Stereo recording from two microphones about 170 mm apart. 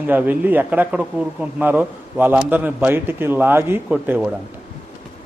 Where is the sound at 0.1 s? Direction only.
10° right (ahead or behind).